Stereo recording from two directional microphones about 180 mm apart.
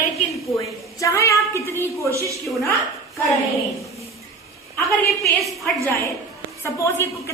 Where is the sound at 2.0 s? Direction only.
15° right (ahead or behind).